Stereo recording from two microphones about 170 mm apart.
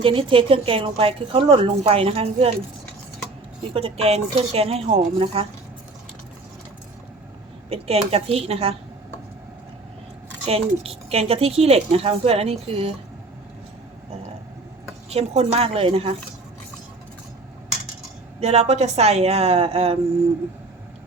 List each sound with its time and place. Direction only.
0.0 s speech: 30° right (ahead or behind)
3.6 s speech: 35° right (ahead or behind)
7.7 s speech: 35° right (ahead or behind)
10.4 s speech: 35° right (ahead or behind)
15.1 s speech: 40° right (ahead or behind)
18.3 s speech: 40° right (ahead or behind)